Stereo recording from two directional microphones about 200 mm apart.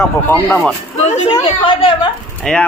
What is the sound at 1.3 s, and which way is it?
Speech, 25° left (ahead or behind).